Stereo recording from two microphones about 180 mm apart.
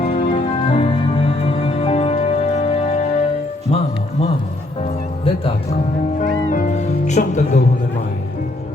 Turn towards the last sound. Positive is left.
turn(degrees=40)  # may be behind; listen again after turning